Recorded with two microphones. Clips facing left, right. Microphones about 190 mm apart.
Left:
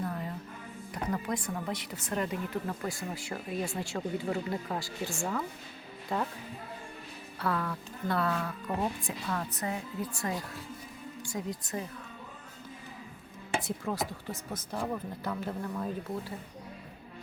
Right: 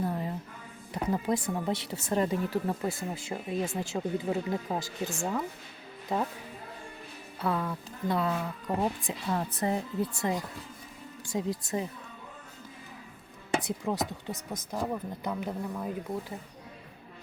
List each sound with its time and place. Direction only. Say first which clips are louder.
0.0 s a sound: right 4 dB; 25° right (ahead or behind)
1.0 s speech: right 4 dB; 25° right (ahead or behind)
7.3 s speech: right 2 dB; 20° right (ahead or behind)
11.3 s speech: right 5 dB; 25° right (ahead or behind)
13.6 s speech: right 2 dB; 20° right (ahead or behind)